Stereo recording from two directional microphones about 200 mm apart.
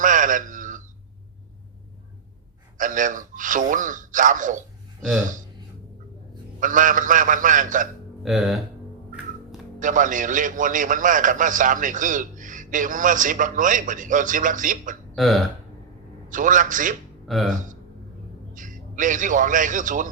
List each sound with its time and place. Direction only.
0.0 s a sound: 40° right (ahead or behind)
2.7 s a man's voice: 40° right (ahead or behind)
6.6 s a man's voice: 40° right (ahead or behind)
8.2 s speech: centre (ahead or behind)
9.8 s a man's voice: 40° right (ahead or behind)
15.1 s speech: centre (ahead or behind)
16.3 s a man's voice: 40° right (ahead or behind)
17.2 s speech: centre (ahead or behind)
18.5 s a man's voice: 40° right (ahead or behind)